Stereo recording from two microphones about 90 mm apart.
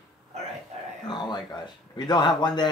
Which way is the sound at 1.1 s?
50° left (ahead or behind).